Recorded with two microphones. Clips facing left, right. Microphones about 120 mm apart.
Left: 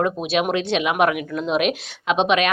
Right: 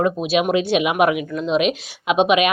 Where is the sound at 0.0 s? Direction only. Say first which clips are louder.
Right 2 dB; 5° right (ahead or behind).